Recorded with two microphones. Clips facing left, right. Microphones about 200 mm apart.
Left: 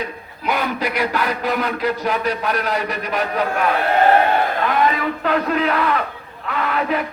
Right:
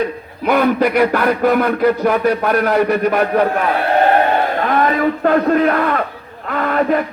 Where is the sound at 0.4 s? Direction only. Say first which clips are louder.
Right 8 dB; 55° right (ahead or behind).